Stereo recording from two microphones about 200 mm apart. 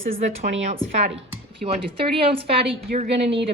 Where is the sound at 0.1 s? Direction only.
40° right (ahead or behind).